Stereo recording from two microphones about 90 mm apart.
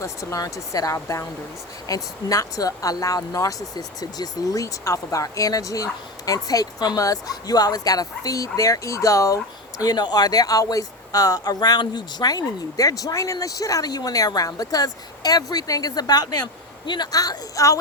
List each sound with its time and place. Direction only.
0.0 s speech: 35° left (ahead or behind)
9.8 s speech: 50° left (ahead or behind)